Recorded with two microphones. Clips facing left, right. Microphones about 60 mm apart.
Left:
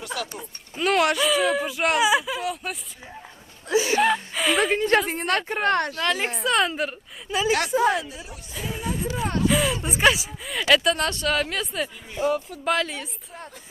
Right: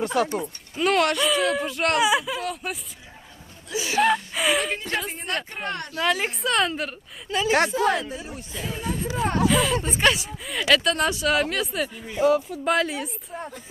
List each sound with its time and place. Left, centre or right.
0.0 s speech: right
0.8 s speech: centre
3.7 s speech: left
3.9 s speech: centre
4.7 s a woman's voice: left
6.0 s speech: centre
8.1 s speech: right
8.5 s chatter: centre
9.1 s speech: centre
9.5 s speech: centre